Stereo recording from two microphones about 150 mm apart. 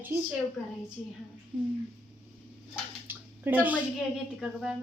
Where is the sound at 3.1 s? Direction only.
10° right (ahead or behind).